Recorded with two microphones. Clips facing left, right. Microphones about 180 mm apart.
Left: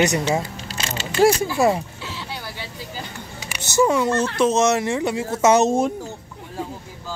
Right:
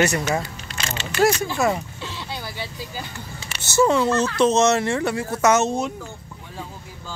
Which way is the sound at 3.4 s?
15° left (ahead or behind).